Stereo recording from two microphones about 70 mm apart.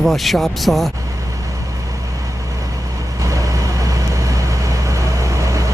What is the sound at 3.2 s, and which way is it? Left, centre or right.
Vehicle, right.